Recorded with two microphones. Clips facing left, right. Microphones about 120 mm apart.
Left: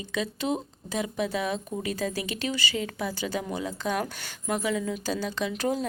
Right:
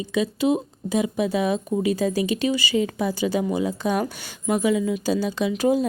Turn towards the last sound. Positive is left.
turn(degrees=-10)  # may be behind; listen again after turning